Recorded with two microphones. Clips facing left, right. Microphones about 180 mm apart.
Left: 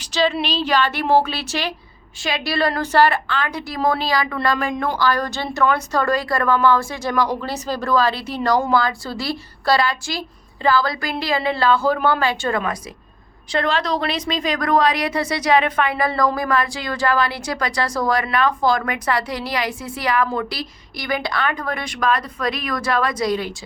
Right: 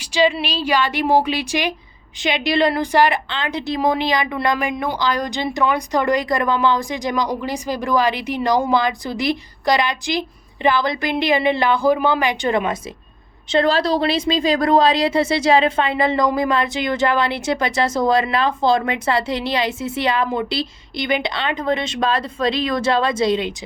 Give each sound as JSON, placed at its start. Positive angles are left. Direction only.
{"t": 0.0, "sound": "a woman's voice", "side_deg": -10}
{"t": 13.5, "sound": "a woman's voice", "side_deg": -30}